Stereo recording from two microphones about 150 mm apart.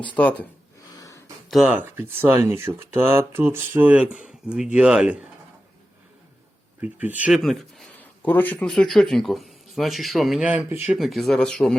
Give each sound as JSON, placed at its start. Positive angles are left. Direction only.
{"t": 0.2, "sound": "speech", "side_deg": 10}
{"t": 0.9, "sound": "a sound", "side_deg": 20}
{"t": 1.5, "sound": "speech", "side_deg": -5}
{"t": 6.8, "sound": "speech", "side_deg": -10}
{"t": 7.9, "sound": "speech", "side_deg": 10}